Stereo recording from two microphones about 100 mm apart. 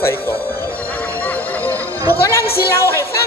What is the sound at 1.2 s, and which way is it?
Music, 15° left (ahead or behind).